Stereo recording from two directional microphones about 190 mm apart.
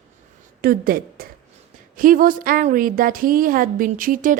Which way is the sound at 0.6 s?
50° right (ahead or behind).